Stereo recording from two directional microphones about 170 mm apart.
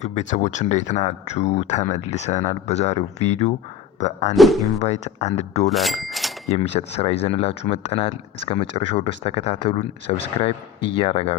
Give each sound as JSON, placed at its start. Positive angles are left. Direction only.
{"t": 0.0, "sound": "speech", "side_deg": 40}
{"t": 4.4, "sound": "speech", "side_deg": 0}
{"t": 4.8, "sound": "speech", "side_deg": 40}
{"t": 5.6, "sound": "speech", "side_deg": 0}
{"t": 6.5, "sound": "speech", "side_deg": 40}